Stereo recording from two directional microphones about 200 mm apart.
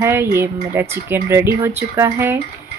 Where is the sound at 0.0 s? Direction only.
10° right (ahead or behind).